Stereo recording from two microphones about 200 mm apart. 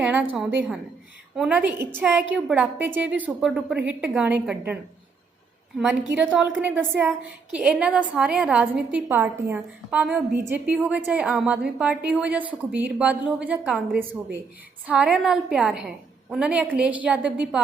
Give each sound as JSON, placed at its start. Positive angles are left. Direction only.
{"t": 0.0, "sound": "a woman's voice", "side_deg": -10}
{"t": 5.8, "sound": "a woman's voice", "side_deg": -5}